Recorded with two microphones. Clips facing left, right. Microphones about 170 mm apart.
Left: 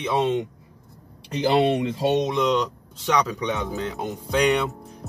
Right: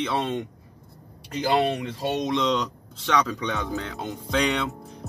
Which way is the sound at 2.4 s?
10° left (ahead or behind).